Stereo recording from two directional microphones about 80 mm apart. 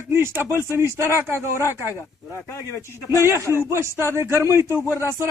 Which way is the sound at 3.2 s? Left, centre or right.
Right.